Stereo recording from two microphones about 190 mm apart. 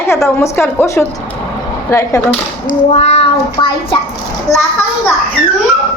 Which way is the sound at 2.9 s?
35° left (ahead or behind).